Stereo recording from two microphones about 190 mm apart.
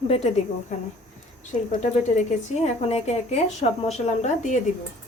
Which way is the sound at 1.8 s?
35° left (ahead or behind).